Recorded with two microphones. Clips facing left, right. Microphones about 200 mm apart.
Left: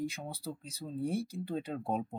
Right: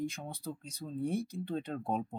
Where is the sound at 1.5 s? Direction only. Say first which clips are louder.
Even; 5° left (ahead or behind).